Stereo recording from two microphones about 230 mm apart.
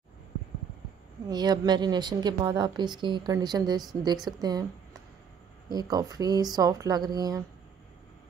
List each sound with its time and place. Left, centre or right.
1.3 s a woman's voice: centre
5.7 s a woman's voice: centre